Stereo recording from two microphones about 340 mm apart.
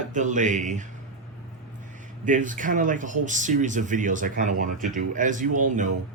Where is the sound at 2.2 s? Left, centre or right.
Right.